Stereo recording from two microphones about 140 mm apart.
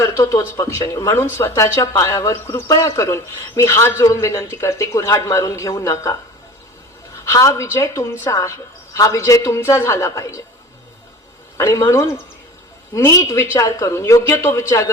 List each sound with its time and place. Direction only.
0.0 s speech: 20° left (ahead or behind)
7.3 s speech: 20° left (ahead or behind)
11.5 s speech: 20° left (ahead or behind)